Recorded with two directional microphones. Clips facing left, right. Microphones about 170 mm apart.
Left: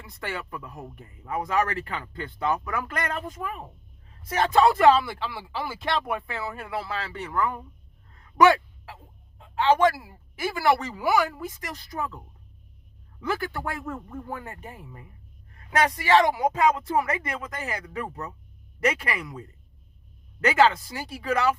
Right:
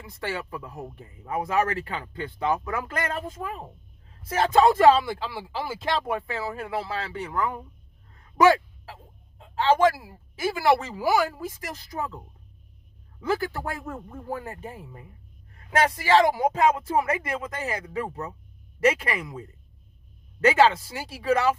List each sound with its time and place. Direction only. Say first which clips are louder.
0.2 s speech: right 2 dB; 30° right (ahead or behind)
8.4 s a sound: even; 30° right (ahead or behind)
9.9 s speech: left 1 dB; 25° right (ahead or behind)
13.2 s speech: right 2 dB; 30° right (ahead or behind)